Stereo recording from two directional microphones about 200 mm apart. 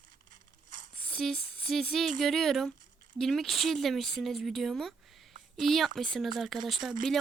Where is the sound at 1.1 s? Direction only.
5° left (ahead or behind).